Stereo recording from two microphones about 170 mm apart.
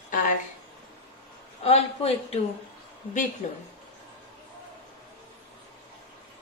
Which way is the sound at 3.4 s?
45° left (ahead or behind).